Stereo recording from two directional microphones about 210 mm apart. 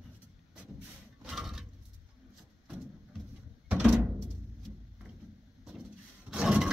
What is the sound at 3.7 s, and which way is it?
Music, 5° right (ahead or behind).